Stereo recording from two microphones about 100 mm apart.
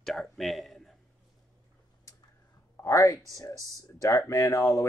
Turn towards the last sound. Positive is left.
turn(degrees=35)  # may be behind; listen again after turning